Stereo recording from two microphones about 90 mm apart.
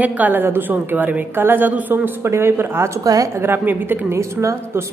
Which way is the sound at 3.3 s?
25° right (ahead or behind).